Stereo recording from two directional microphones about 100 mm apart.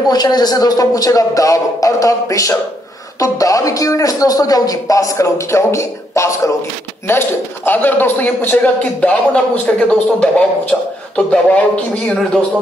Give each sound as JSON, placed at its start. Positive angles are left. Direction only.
{"t": 0.1, "sound": "a man's voice", "side_deg": 40}